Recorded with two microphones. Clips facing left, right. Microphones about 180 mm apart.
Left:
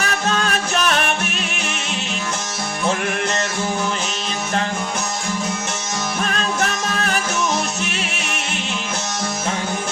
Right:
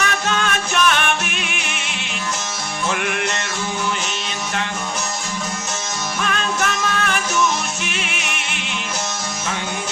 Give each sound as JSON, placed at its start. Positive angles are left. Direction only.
{"t": 0.0, "sound": "music", "side_deg": 35}
{"t": 6.2, "sound": "music", "side_deg": 35}